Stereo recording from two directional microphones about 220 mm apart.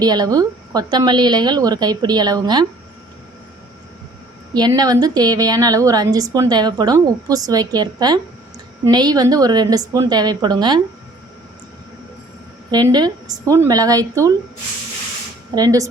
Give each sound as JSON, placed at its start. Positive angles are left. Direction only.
{"t": 0.0, "sound": "a woman's voice", "side_deg": -20}
{"t": 4.5, "sound": "a woman's voice", "side_deg": -15}
{"t": 12.7, "sound": "a woman's voice", "side_deg": -20}
{"t": 15.5, "sound": "a woman's voice", "side_deg": -15}